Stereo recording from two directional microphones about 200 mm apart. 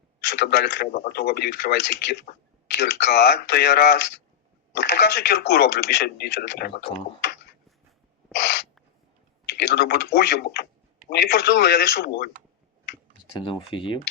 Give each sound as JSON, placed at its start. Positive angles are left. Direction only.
{"t": 0.3, "sound": "speech", "side_deg": 55}
{"t": 9.7, "sound": "speech", "side_deg": 50}
{"t": 13.4, "sound": "speech", "side_deg": 25}